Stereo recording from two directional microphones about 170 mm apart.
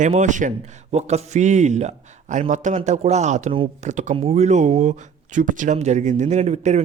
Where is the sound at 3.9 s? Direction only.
45° right (ahead or behind).